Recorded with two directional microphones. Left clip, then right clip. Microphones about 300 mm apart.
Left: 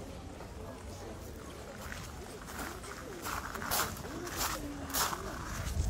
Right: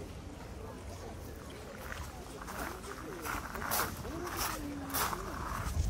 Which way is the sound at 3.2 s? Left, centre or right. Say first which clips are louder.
Even; centre.